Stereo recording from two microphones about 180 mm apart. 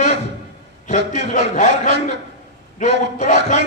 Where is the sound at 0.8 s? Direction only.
45° left (ahead or behind).